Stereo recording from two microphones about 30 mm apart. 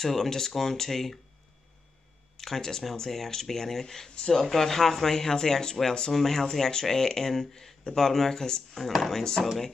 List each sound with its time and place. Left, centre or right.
0.0 s speech: centre
2.3 s speech: centre
8.7 s speech: centre